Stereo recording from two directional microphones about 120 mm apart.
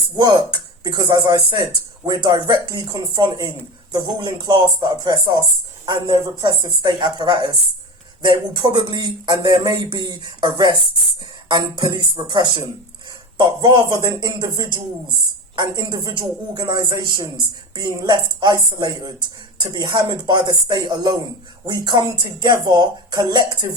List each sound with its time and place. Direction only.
0.2 s speech: 35° right (ahead or behind)